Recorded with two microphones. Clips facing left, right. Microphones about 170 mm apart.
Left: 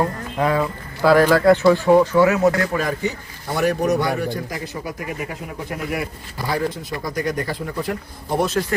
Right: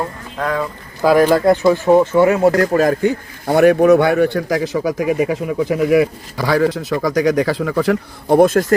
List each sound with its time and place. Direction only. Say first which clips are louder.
0.3 s speech: left 1 dB; 10° left (ahead or behind)
1.0 s speech: right 2 dB; 15° right (ahead or behind); by 2.9 s 40° right (ahead or behind)
2.9 s a man's voice: right 8 dB; 55° right (ahead or behind); by 8.4 s 85° right
8.4 s speech: right 9 dB; 50° right (ahead or behind)